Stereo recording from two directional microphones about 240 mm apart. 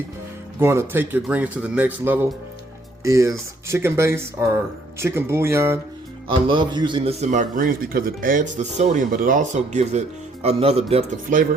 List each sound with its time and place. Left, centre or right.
0.6 s speech: centre
6.2 s a man's voice: right